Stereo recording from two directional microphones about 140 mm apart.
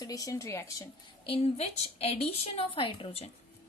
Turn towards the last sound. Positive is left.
turn(degrees=40)  # may be behind; listen again after turning